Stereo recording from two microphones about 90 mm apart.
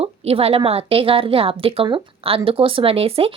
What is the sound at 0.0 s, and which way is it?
A woman's voice, 90° right.